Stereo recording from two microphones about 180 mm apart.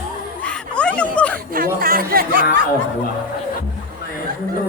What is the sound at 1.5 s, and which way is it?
Chatter, 50° right (ahead or behind).